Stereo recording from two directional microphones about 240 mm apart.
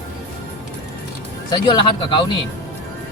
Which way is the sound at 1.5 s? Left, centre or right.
Centre.